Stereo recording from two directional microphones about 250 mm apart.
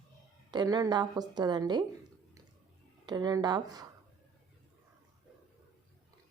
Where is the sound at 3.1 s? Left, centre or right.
Centre.